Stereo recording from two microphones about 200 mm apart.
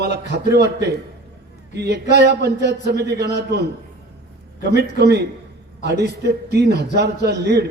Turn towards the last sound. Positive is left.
turn(degrees=-55)  # may be behind; listen again after turning